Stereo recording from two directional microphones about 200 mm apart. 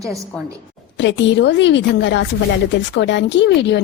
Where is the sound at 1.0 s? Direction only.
65° left (ahead or behind).